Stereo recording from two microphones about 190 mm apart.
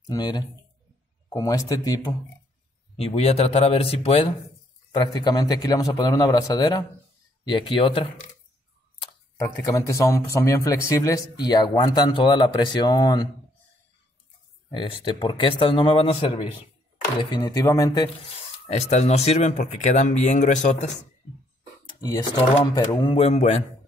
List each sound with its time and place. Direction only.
0.1 s speech: 20° left (ahead or behind)
3.0 s speech: 35° left (ahead or behind)
9.7 s speech: 15° left (ahead or behind)
14.7 s speech: 25° left (ahead or behind)
18.7 s speech: 35° left (ahead or behind)
21.8 s speech: 20° left (ahead or behind)